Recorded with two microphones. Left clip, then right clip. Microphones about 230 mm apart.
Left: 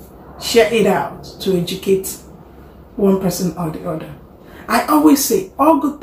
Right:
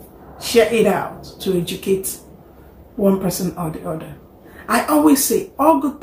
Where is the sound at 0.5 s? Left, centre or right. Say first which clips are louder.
Left 2 dB; centre.